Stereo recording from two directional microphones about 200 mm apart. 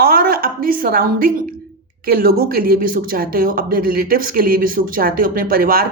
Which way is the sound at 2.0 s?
45° right (ahead or behind).